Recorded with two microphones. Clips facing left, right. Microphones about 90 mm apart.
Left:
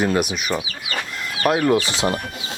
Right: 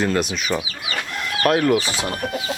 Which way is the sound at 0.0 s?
10° left (ahead or behind).